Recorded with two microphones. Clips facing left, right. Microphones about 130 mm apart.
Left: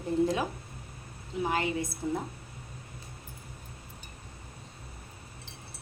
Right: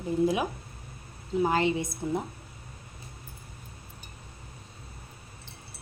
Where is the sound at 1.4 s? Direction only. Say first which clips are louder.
Right 4 dB; 30° right (ahead or behind).